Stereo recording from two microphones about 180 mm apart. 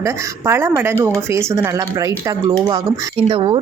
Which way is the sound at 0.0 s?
15° right (ahead or behind).